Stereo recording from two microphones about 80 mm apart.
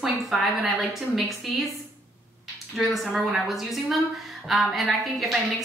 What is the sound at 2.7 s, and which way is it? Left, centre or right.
A woman's voice, centre.